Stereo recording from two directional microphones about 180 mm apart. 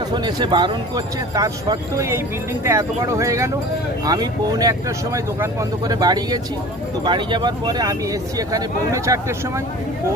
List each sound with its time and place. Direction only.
0.1 s speech: 25° right (ahead or behind)